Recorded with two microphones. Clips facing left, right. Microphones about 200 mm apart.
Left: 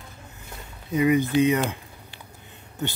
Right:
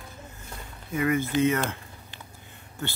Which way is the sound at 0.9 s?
15° left (ahead or behind).